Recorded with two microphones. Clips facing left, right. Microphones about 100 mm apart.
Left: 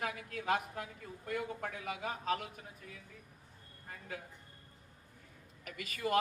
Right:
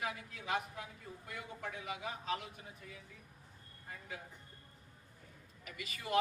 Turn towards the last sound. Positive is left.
turn(degrees=50)  # may be behind; listen again after turning